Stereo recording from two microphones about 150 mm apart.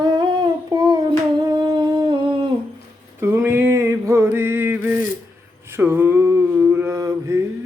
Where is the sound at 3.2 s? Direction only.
15° right (ahead or behind).